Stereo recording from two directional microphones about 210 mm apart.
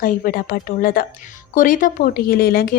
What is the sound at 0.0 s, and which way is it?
A woman's voice, 40° left (ahead or behind).